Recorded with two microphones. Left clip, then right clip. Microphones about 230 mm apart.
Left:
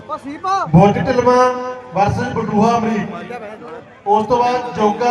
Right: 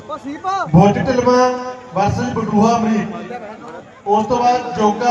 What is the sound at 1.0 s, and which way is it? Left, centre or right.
Music, left.